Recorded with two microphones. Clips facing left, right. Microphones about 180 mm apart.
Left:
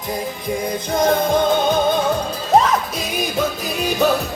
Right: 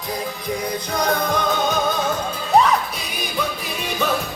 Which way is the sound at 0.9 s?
25° left (ahead or behind).